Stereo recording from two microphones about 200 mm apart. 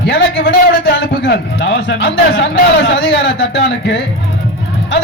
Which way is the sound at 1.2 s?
60° left (ahead or behind).